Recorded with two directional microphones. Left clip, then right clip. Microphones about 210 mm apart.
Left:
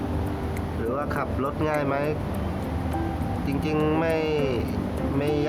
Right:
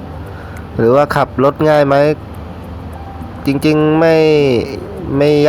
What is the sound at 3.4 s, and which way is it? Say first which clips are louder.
Speech: right 17 dB; 40° right (ahead or behind).